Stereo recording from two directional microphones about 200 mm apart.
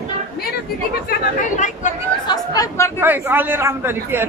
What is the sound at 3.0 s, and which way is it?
A man's voice, 10° right (ahead or behind).